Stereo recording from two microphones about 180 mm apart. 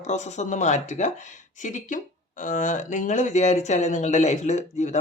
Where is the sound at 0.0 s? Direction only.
40° left (ahead or behind).